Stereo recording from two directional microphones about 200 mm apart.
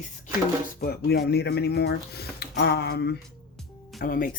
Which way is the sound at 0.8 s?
55° left (ahead or behind).